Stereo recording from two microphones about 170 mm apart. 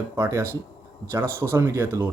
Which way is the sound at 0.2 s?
15° right (ahead or behind).